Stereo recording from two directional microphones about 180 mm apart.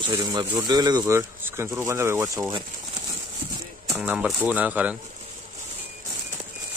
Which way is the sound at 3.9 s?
5° right (ahead or behind).